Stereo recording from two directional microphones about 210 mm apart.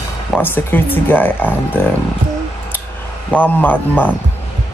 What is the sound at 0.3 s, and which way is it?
Speech, 10° left (ahead or behind).